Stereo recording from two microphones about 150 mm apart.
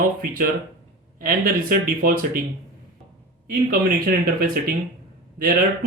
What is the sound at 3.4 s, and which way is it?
Speech, 85° right.